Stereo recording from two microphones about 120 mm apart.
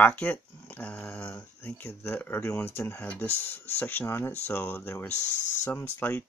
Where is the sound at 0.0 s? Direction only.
15° left (ahead or behind).